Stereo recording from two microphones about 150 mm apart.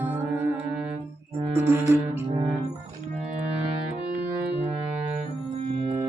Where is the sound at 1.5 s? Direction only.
15° right (ahead or behind).